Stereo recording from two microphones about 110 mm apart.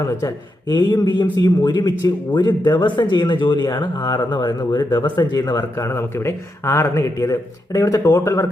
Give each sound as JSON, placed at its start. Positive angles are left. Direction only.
{"t": 0.0, "sound": "speech", "side_deg": 25}
{"t": 0.7, "sound": "a man's voice", "side_deg": 40}